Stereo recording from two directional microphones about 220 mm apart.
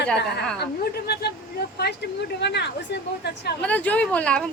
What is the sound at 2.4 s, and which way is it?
Speech, 50° left (ahead or behind).